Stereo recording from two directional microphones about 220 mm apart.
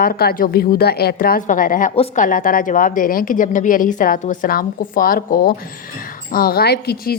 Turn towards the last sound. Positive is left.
turn(degrees=45)  # may be behind; listen again after turning